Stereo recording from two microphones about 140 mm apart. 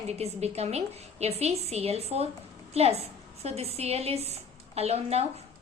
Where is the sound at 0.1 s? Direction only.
50° right (ahead or behind).